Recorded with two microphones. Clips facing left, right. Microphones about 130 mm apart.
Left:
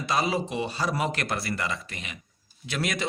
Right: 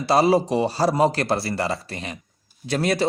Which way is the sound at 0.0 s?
35° right (ahead or behind).